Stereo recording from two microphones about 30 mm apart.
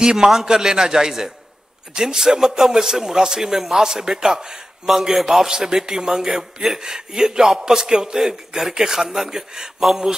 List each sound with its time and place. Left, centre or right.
0.0 s a man's voice: centre